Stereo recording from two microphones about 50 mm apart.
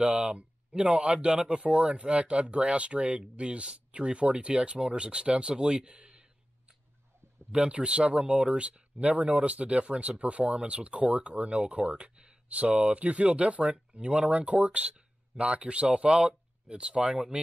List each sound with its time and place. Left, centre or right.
0.0 s speech: right
7.5 s speech: right